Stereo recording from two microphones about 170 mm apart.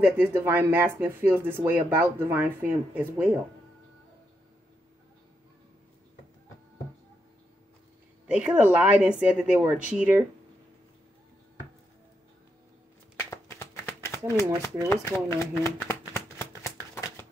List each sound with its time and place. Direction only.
0.0 s speech: 15° right (ahead or behind)
8.3 s speech: 5° right (ahead or behind)
13.2 s a sound: 15° left (ahead or behind)
14.9 s shuffling cards: 15° left (ahead or behind)